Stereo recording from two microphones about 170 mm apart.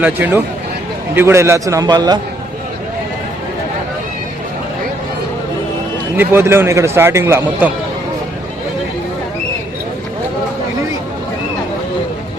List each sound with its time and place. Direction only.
0.0 s a man's voice: 10° right (ahead or behind)
6.1 s a man's voice: 15° right (ahead or behind)